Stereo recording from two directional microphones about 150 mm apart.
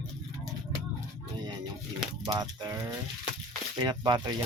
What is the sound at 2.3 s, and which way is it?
Speech, 25° right (ahead or behind).